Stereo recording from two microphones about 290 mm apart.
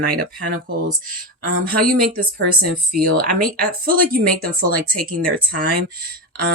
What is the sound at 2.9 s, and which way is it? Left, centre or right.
Speech, right.